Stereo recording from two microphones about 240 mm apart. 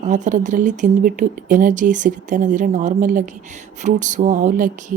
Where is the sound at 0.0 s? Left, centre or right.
Right.